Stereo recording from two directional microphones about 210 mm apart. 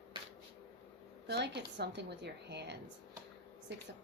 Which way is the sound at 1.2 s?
55° right (ahead or behind).